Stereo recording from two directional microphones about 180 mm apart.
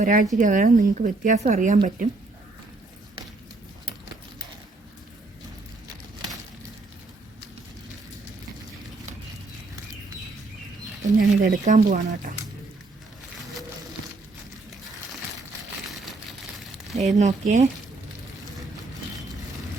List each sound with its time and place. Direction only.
0.0 s speech: 50° right (ahead or behind)
11.0 s speech: 45° right (ahead or behind)
15.9 s a sound: centre (ahead or behind)
17.2 s speech: 45° right (ahead or behind)